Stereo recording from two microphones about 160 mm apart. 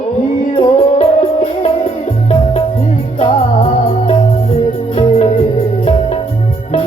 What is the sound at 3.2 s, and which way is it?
Music, 45° left (ahead or behind).